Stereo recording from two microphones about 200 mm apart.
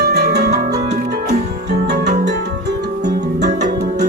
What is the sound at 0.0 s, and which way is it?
Music, 55° right (ahead or behind).